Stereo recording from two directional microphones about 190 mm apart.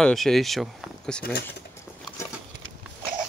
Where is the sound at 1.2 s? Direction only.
55° left (ahead or behind).